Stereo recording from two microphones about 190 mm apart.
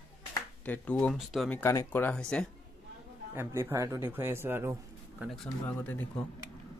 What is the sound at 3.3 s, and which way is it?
Speech, 15° right (ahead or behind).